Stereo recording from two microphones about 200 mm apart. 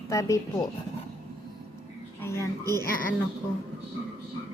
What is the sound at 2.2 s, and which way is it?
Female singing, 15° left (ahead or behind).